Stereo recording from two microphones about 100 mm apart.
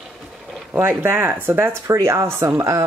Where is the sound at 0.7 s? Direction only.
20° right (ahead or behind).